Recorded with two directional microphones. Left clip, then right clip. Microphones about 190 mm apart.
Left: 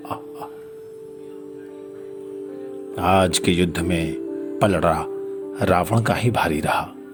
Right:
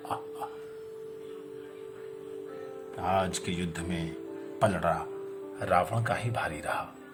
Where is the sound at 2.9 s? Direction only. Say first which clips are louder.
Left 11 dB; 35° left (ahead or behind).